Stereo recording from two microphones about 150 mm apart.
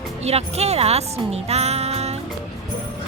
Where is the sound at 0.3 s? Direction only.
45° right (ahead or behind).